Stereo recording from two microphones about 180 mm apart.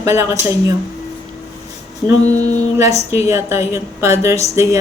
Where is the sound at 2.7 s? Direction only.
15° right (ahead or behind).